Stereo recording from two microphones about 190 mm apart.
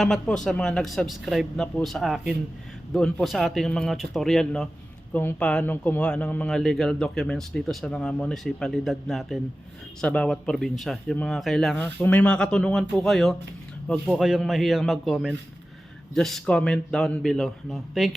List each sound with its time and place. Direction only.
0.0 s speech: 5° left (ahead or behind)